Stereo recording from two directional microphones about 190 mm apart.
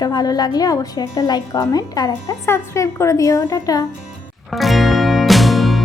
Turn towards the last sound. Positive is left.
turn(degrees=0)  # may be behind; listen again after turning